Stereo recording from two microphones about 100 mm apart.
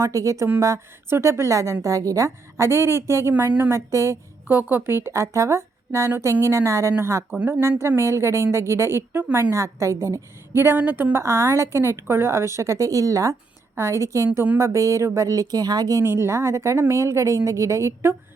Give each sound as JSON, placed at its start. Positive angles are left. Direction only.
{"t": 0.0, "sound": "a woman's voice", "side_deg": -30}
{"t": 4.4, "sound": "a woman's voice", "side_deg": -20}
{"t": 7.3, "sound": "speech", "side_deg": -15}
{"t": 7.6, "sound": "a woman's voice", "side_deg": -25}
{"t": 14.3, "sound": "speech", "side_deg": -15}
{"t": 14.6, "sound": "speech", "side_deg": -30}